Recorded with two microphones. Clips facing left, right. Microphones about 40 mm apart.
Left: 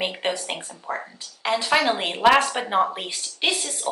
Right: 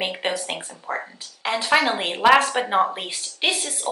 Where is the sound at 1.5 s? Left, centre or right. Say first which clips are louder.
Right 1 dB; centre.